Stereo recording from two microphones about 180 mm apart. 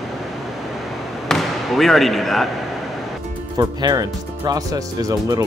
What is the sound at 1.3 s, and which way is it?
Speech, centre (ahead or behind).